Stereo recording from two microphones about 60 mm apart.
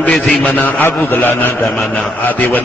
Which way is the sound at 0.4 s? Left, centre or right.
Left.